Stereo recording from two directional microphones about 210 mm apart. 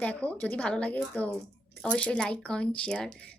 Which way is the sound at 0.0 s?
5° left (ahead or behind).